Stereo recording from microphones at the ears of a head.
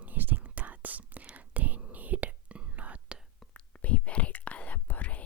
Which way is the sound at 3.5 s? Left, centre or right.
Left.